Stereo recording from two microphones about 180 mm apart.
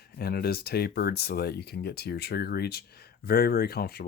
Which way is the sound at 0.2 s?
60° left (ahead or behind).